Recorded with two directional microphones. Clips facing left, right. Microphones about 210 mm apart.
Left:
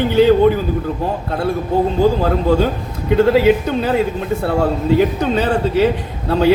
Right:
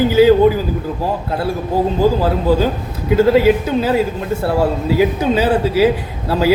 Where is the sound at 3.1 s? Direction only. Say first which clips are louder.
Right 1 dB; centre (ahead or behind).